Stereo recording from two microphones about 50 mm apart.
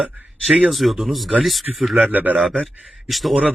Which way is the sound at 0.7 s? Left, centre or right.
Centre.